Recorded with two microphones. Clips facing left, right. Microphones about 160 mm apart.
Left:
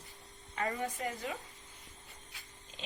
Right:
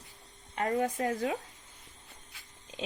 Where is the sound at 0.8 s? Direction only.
80° right.